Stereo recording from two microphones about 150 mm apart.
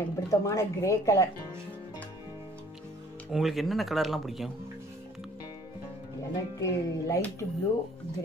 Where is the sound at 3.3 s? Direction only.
Centre (ahead or behind).